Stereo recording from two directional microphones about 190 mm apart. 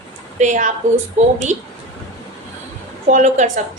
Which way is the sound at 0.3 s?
40° right (ahead or behind).